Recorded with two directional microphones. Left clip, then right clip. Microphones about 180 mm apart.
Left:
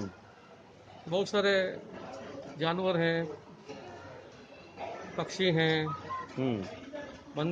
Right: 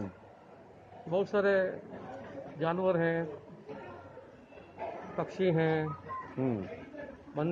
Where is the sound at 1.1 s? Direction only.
15° left (ahead or behind).